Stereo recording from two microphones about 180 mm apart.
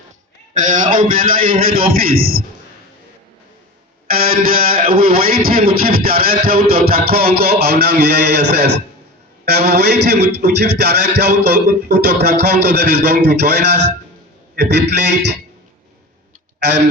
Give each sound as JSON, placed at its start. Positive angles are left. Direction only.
{"t": 0.5, "sound": "a man's voice", "side_deg": -45}
{"t": 4.1, "sound": "a sound", "side_deg": -55}
{"t": 4.9, "sound": "music", "side_deg": -55}